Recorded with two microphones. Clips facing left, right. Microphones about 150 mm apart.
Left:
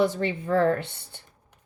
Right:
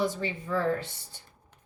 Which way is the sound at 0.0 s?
60° left (ahead or behind).